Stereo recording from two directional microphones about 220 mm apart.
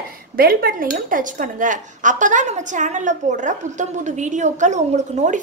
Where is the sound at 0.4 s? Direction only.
40° right (ahead or behind).